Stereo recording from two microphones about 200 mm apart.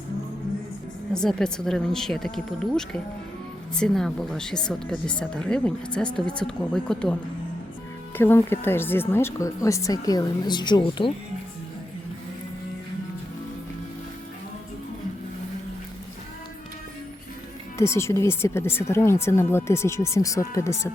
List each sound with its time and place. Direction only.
1.1 s speech: 5° left (ahead or behind)
8.2 s speech: 10° left (ahead or behind)
17.7 s speech: 15° left (ahead or behind)